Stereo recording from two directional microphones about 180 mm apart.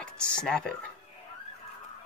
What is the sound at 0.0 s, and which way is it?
Speech, 5° left (ahead or behind).